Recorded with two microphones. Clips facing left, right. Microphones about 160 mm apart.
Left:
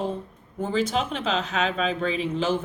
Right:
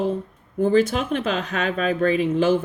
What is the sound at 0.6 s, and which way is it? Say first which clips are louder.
Speech: right 6 dB; 55° right (ahead or behind).